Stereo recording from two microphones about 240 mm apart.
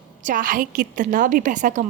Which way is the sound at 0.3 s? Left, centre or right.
Right.